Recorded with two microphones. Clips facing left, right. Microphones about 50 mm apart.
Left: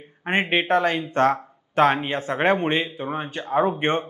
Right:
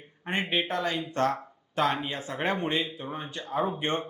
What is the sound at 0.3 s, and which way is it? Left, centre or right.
Speech, left.